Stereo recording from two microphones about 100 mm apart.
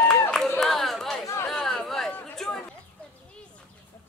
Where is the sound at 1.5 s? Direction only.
Centre (ahead or behind).